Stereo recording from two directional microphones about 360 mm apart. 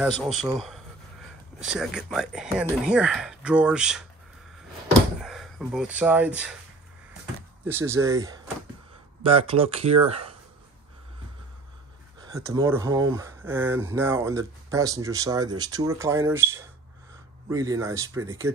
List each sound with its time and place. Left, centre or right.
0.2 s speech: centre
5.2 s speech: centre
7.6 s speech: centre
12.2 s speech: centre